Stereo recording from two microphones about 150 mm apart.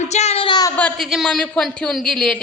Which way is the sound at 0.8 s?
10° left (ahead or behind).